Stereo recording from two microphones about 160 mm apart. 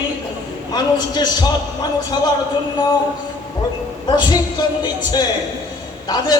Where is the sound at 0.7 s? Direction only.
25° left (ahead or behind).